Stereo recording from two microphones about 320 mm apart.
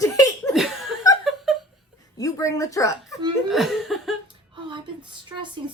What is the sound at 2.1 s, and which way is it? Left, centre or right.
Speech, centre.